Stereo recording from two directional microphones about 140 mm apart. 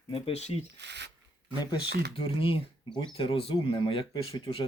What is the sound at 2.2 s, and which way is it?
Speech, 40° left (ahead or behind).